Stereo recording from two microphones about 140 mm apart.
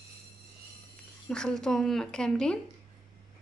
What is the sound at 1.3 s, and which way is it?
Speech, 5° left (ahead or behind).